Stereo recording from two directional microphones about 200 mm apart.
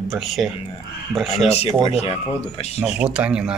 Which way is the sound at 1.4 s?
30° left (ahead or behind).